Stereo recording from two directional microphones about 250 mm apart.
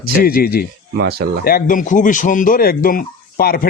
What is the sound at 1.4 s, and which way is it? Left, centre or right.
A man's voice, left.